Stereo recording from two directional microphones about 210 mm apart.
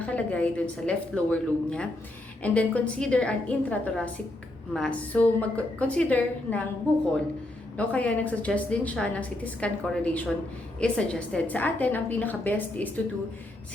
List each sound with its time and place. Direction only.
0.0 s a woman's voice: 5° left (ahead or behind)
7.8 s a woman's voice: 5° left (ahead or behind)